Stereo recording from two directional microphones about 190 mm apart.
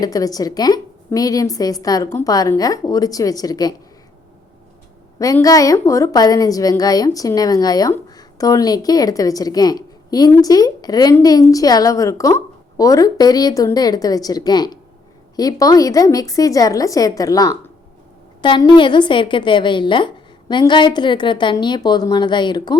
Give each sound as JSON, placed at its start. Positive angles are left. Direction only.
{"t": 0.0, "sound": "a woman's voice", "side_deg": 20}
{"t": 5.2, "sound": "a woman's voice", "side_deg": 20}